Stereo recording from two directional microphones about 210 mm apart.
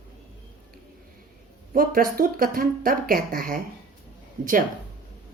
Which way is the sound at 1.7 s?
40° right (ahead or behind).